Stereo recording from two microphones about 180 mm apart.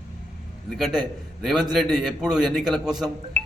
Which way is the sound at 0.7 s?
Centre (ahead or behind).